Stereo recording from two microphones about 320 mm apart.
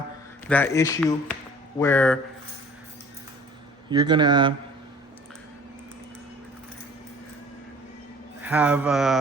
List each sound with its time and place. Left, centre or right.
0.4 s a man's voice: centre
3.8 s speech: centre
8.4 s speech: centre